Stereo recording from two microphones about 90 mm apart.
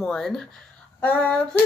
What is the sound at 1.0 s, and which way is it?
Female singing, 15° left (ahead or behind).